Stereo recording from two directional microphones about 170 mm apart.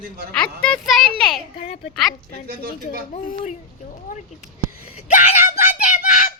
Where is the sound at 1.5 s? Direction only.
40° left (ahead or behind).